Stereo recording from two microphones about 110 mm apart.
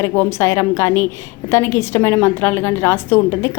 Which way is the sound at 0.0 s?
25° left (ahead or behind).